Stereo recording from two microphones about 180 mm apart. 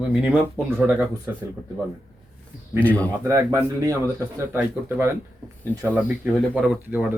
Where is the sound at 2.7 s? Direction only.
10° left (ahead or behind).